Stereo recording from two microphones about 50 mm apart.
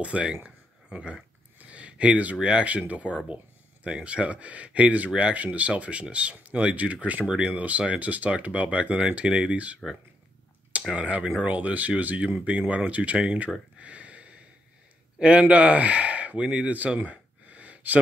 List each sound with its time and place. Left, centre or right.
0.0 s speech: right
0.8 s a sound: right
2.4 s speech: right
10.9 s speech: right
11.4 s speech: right
13.7 s a sound: right
15.1 s speech: right